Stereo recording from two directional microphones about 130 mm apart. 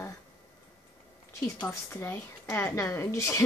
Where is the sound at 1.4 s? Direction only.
25° left (ahead or behind).